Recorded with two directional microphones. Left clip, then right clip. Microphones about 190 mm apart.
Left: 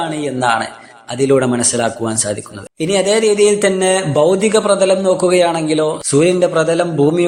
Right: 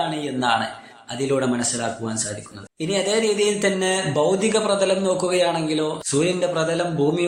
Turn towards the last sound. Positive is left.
turn(degrees=35)  # may be behind; listen again after turning